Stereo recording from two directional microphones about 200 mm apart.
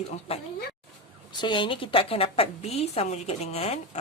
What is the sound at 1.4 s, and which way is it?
A woman's voice, 25° left (ahead or behind).